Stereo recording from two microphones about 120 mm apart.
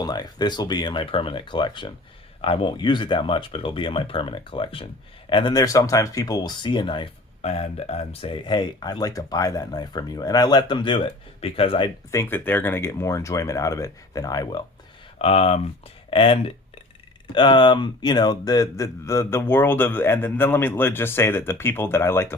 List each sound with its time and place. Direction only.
0.0 s speech: 35° left (ahead or behind); by 11.9 s 50° left (ahead or behind)
12.1 s speech: 15° left (ahead or behind); by 14.6 s 30° left (ahead or behind)
15.2 s speech: 55° left (ahead or behind); by 22.4 s 20° left (ahead or behind)